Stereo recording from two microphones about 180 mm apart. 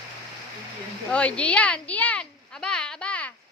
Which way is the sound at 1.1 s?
5° left (ahead or behind).